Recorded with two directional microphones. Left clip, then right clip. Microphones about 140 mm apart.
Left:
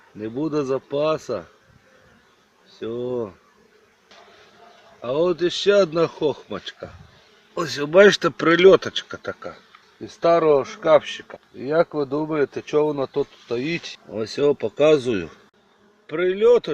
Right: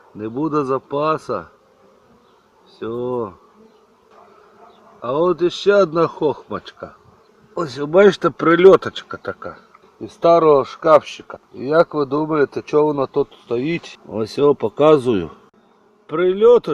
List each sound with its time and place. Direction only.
0.2 s a man's voice: centre (ahead or behind)
2.7 s a man's voice: centre (ahead or behind)
4.9 s a man's voice: centre (ahead or behind)
7.9 s speech: 10° left (ahead or behind)
8.4 s a man's voice: 5° right (ahead or behind)
10.0 s speech: 10° right (ahead or behind)
14.1 s a man's voice: 30° right (ahead or behind)